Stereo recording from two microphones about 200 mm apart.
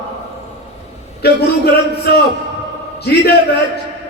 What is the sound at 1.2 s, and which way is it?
A man's voice, 55° left (ahead or behind).